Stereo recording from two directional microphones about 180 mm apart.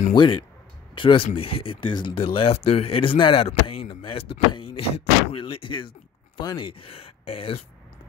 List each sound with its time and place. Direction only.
0.1 s speech: 25° left (ahead or behind)